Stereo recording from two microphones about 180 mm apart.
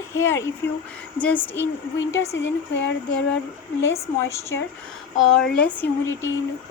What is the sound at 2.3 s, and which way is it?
Speech, 90° left.